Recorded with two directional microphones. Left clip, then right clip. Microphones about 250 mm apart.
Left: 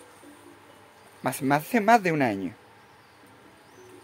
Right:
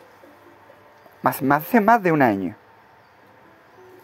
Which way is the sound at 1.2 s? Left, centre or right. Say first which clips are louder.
Right 6 dB; centre.